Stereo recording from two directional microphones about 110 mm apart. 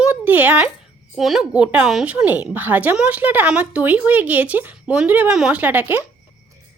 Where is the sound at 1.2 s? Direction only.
Centre (ahead or behind).